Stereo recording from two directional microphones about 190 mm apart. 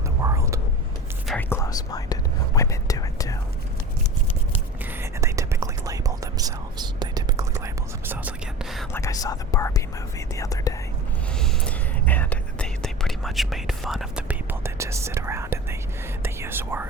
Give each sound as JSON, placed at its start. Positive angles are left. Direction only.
{"t": 0.2, "sound": "vehicle", "side_deg": -15}
{"t": 1.3, "sound": "whispering", "side_deg": 10}
{"t": 4.9, "sound": "whispering", "side_deg": -15}
{"t": 8.9, "sound": "whispering", "side_deg": 15}
{"t": 11.3, "sound": "whispering", "side_deg": 5}
{"t": 16.2, "sound": "speech", "side_deg": -10}